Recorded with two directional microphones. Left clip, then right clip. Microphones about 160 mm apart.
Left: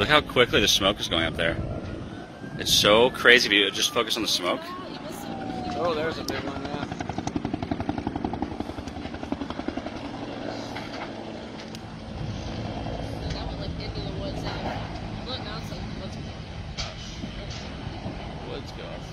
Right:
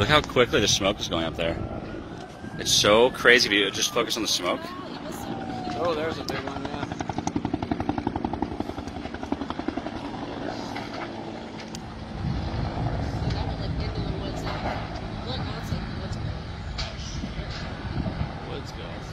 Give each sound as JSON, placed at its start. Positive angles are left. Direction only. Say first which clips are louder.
{"t": 0.0, "sound": "speech", "louder": "even", "side_deg": -10}
{"t": 2.6, "sound": "speech", "louder": "even", "side_deg": -10}
{"t": 5.8, "sound": "vehicle", "louder": "even", "side_deg": 75}